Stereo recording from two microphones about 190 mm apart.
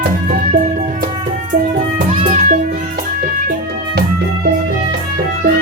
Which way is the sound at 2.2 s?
40° right (ahead or behind).